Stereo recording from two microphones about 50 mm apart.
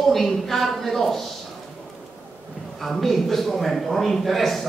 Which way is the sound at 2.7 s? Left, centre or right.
Centre.